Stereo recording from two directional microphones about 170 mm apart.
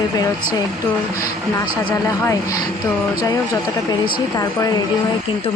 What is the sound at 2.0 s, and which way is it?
Speech, 20° left (ahead or behind).